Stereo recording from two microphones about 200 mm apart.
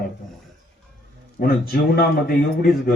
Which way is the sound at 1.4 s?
50° left (ahead or behind).